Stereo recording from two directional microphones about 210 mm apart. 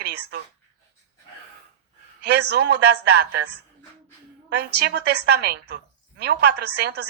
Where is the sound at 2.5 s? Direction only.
50° right (ahead or behind).